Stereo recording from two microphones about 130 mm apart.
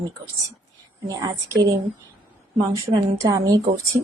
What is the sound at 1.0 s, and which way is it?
Speech, 30° right (ahead or behind).